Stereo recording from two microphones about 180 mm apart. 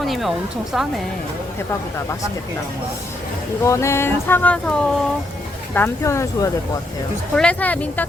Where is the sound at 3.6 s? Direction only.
15° left (ahead or behind).